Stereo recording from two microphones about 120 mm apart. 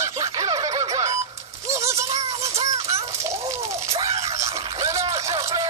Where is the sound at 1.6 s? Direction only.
25° right (ahead or behind).